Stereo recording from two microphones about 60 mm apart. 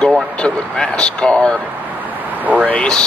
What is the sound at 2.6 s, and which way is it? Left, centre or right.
Speech, centre.